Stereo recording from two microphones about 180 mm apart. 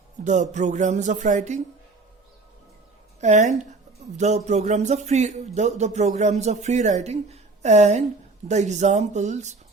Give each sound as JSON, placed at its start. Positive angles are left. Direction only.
{"t": 0.3, "sound": "music", "side_deg": -40}
{"t": 3.2, "sound": "a man's voice", "side_deg": -40}